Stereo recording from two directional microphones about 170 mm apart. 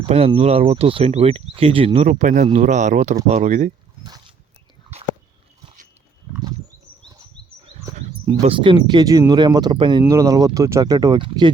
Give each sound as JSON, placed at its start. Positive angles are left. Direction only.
{"t": 0.0, "sound": "speech", "side_deg": -35}
{"t": 7.9, "sound": "a sound", "side_deg": -35}
{"t": 8.9, "sound": "speech", "side_deg": -25}